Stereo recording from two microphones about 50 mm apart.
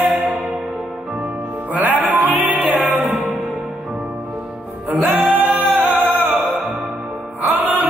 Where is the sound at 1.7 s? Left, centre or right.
Right.